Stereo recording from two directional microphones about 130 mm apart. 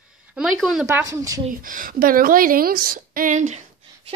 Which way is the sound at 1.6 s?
90° right.